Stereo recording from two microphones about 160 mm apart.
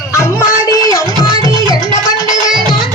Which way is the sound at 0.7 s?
20° left (ahead or behind).